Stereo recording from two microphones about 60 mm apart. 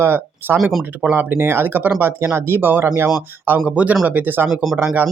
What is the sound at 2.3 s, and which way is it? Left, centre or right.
Speech, right.